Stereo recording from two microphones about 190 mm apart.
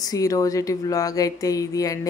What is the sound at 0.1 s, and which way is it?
Speech, 20° left (ahead or behind).